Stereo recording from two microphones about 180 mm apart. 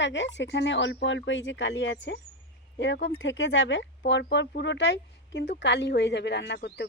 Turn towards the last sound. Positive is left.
turn(degrees=65)  # may be behind; listen again after turning